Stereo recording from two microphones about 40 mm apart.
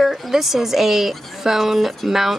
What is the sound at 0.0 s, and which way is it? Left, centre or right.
A woman's voice, centre.